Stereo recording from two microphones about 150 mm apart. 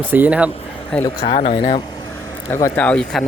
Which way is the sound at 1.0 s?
35° left (ahead or behind).